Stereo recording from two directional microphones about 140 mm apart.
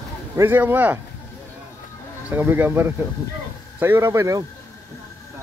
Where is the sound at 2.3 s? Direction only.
15° right (ahead or behind).